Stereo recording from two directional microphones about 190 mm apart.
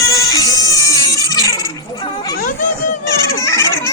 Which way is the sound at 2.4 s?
45° left (ahead or behind).